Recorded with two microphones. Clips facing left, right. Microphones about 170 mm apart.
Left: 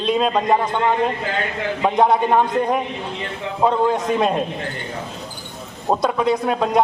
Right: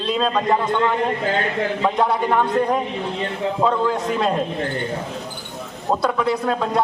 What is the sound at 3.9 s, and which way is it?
Speech, 20° left (ahead or behind).